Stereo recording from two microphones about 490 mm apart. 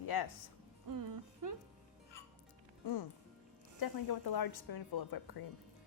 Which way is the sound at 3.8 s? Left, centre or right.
Left.